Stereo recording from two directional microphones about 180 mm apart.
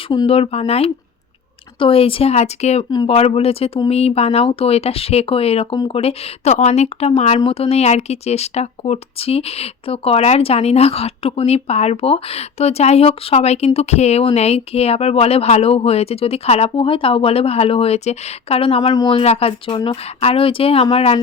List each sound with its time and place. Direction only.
0.1 s speech: 30° left (ahead or behind)
19.2 s speech: 35° left (ahead or behind)